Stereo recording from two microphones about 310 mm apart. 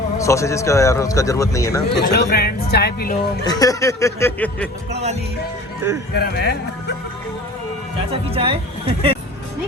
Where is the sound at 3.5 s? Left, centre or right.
Centre.